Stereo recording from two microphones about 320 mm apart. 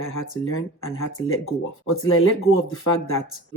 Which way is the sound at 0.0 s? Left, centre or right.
Left.